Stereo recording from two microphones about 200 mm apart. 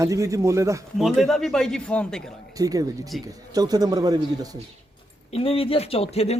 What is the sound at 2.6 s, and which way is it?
A man's voice, 15° right (ahead or behind).